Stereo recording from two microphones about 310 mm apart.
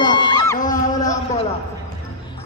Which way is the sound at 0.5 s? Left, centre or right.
Left.